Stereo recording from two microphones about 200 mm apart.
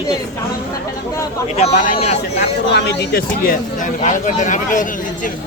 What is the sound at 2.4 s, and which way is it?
Speech, 55° left (ahead or behind).